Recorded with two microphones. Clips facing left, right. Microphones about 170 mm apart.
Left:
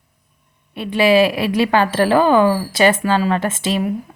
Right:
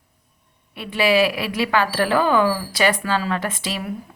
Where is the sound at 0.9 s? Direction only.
25° left (ahead or behind).